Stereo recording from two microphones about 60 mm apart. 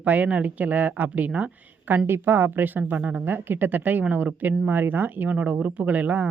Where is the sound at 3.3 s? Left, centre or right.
Right.